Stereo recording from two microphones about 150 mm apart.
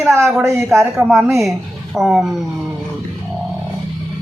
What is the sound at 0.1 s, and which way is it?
Speech, 20° right (ahead or behind).